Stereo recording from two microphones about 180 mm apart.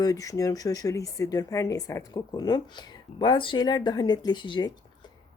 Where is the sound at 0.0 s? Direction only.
20° left (ahead or behind).